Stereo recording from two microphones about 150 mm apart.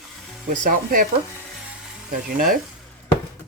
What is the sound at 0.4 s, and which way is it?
Speech, 65° right (ahead or behind).